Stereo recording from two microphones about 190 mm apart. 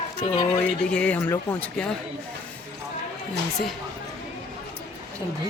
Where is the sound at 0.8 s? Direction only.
5° left (ahead or behind).